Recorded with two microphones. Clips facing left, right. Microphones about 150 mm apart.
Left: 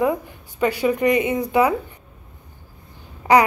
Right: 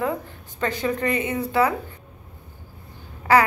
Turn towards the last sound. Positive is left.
turn(degrees=15)  # may be behind; listen again after turning